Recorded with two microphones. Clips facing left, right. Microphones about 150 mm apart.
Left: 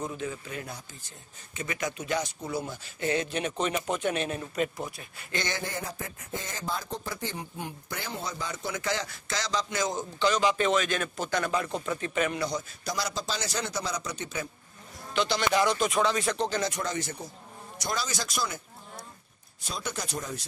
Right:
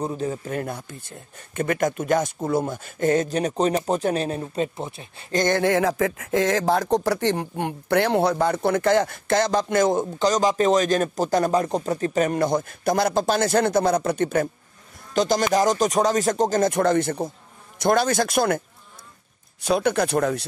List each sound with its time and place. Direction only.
0.0 s speech: 40° right (ahead or behind)
5.3 s speech: 45° right (ahead or behind)
5.6 s speech: 90° right; by 10.2 s 55° right (ahead or behind)
10.2 s speech: 40° right (ahead or behind)
15.1 s speech: 45° right (ahead or behind)
19.6 s speech: 65° right (ahead or behind)